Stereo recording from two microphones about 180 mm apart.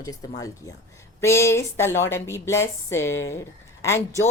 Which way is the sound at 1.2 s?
15° left (ahead or behind).